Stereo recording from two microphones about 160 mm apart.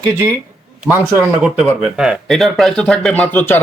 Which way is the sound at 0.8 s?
15° right (ahead or behind).